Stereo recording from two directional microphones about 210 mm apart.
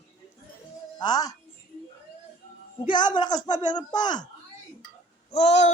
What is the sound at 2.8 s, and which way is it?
Speech, 20° left (ahead or behind).